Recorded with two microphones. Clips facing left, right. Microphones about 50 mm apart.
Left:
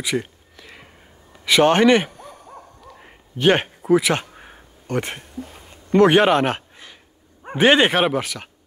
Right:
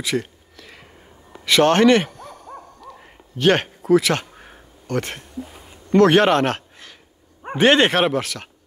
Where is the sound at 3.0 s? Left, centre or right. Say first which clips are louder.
Even; centre.